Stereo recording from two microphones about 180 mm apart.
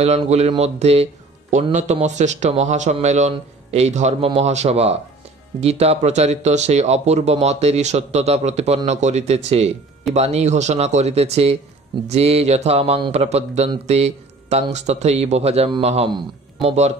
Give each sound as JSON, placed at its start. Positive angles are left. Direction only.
{"t": 0.2, "sound": "speech", "side_deg": -30}